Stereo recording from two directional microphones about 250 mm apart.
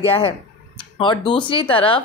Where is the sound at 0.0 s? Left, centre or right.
Left.